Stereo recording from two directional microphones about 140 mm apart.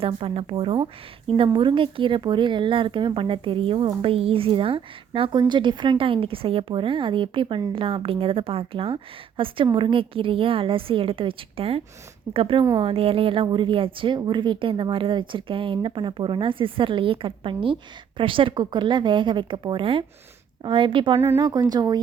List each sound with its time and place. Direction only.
0.0 s speech: 40° right (ahead or behind)
21.2 s speech: 20° right (ahead or behind)
21.7 s speech: 30° right (ahead or behind)